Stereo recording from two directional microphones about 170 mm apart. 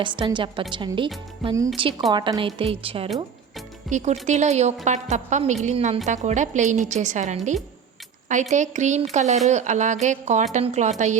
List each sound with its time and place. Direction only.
0.0 s a woman's voice: 30° right (ahead or behind)
3.8 s a woman's voice: 45° right (ahead or behind)